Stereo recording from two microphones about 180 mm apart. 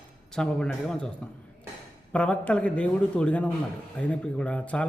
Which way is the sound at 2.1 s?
5° left (ahead or behind).